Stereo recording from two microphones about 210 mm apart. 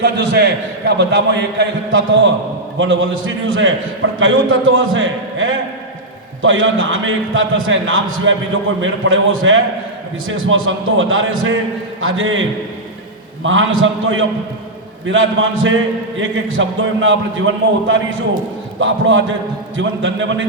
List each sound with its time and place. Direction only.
0.0 s a man's voice: 55° right (ahead or behind)